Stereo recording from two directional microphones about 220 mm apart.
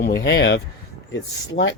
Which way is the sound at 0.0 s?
50° left (ahead or behind).